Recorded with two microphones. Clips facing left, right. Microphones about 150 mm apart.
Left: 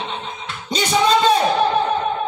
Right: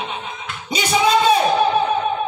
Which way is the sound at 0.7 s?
10° right (ahead or behind).